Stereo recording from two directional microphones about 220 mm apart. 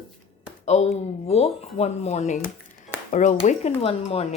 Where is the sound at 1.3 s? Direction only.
30° left (ahead or behind).